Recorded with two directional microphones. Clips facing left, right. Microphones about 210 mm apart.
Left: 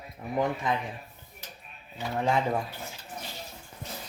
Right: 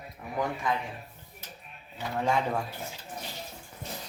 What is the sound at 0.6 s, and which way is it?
Speech, 20° left (ahead or behind).